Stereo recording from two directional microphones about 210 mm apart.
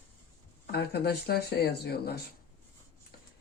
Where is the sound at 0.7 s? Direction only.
50° left (ahead or behind).